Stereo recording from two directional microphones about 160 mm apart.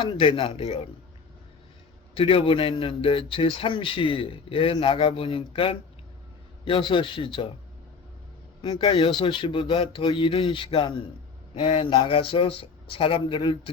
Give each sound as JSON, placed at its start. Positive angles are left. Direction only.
{"t": 0.0, "sound": "speech", "side_deg": 35}
{"t": 2.1, "sound": "speech", "side_deg": 35}
{"t": 8.6, "sound": "speech", "side_deg": 30}